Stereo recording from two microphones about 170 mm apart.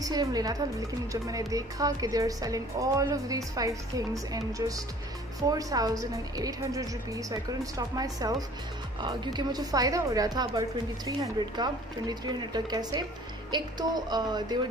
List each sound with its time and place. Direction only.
0.0 s speech: 25° right (ahead or behind)